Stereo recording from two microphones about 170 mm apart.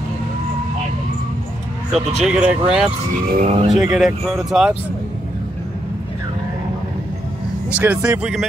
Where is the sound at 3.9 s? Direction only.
Centre (ahead or behind).